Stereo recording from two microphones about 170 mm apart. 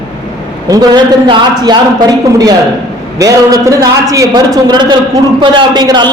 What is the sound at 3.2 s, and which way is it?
A man's voice, 20° right (ahead or behind).